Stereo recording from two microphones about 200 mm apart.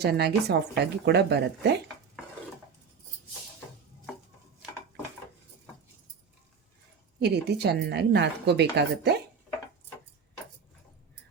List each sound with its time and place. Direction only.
0.0 s a woman's voice: 55° right (ahead or behind)
7.2 s a woman's voice: 55° right (ahead or behind)